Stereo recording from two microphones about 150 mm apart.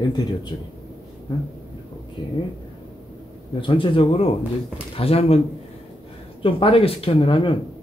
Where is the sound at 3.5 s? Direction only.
35° left (ahead or behind).